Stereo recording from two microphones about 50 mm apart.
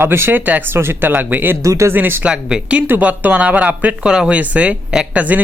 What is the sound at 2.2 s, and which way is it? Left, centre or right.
Speech, right.